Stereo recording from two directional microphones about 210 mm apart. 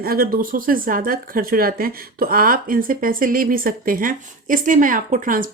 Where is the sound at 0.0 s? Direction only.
45° right (ahead or behind).